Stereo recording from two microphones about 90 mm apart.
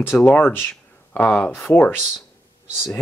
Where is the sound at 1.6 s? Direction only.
20° left (ahead or behind).